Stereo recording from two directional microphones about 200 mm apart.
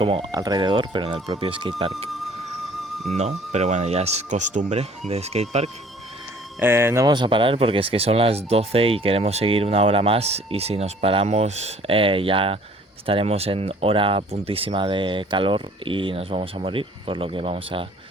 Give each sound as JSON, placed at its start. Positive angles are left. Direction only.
{"t": 0.0, "sound": "speech", "side_deg": -25}
{"t": 2.0, "sound": "music", "side_deg": 0}
{"t": 3.2, "sound": "speech", "side_deg": -35}
{"t": 6.6, "sound": "speech", "side_deg": -10}